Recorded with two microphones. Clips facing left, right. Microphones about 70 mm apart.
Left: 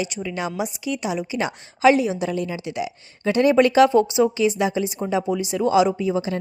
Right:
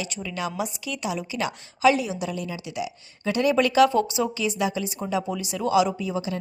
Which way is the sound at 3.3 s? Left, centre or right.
Left.